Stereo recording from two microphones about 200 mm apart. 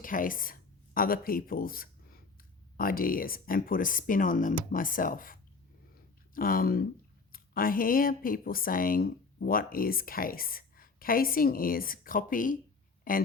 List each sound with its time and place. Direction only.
0.0 s speech: 45° left (ahead or behind)